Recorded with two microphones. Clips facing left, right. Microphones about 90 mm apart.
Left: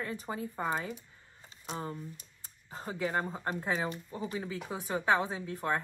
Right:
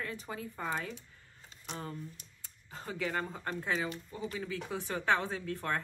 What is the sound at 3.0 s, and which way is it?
Speech, 30° left (ahead or behind).